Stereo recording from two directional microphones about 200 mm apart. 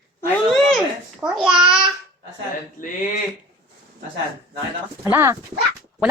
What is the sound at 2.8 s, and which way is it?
Speech, 45° left (ahead or behind).